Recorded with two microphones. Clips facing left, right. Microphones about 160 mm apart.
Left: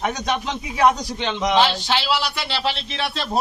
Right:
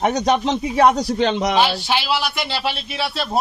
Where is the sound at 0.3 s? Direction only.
35° right (ahead or behind).